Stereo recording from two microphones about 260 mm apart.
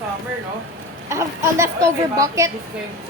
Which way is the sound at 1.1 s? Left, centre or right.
Centre.